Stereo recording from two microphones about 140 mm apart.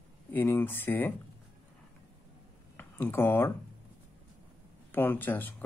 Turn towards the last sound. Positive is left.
turn(degrees=15)  # may be behind; listen again after turning